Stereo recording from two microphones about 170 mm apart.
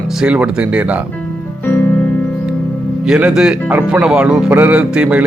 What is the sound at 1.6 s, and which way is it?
Music, 10° left (ahead or behind).